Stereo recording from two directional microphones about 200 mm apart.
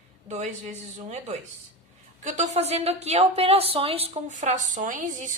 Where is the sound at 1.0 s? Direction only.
35° right (ahead or behind).